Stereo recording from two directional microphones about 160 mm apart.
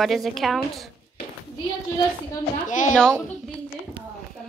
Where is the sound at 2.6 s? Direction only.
55° left (ahead or behind).